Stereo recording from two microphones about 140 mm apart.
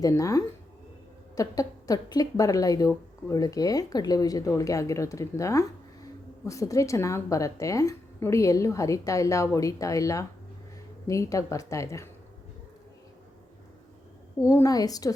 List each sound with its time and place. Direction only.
0.0 s speech: 25° left (ahead or behind)
14.3 s speech: 20° left (ahead or behind)